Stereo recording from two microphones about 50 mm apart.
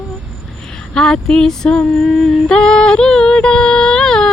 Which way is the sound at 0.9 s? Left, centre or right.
Centre.